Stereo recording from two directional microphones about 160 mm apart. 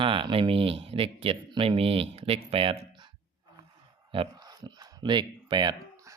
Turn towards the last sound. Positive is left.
turn(degrees=-25)  # may be behind; listen again after turning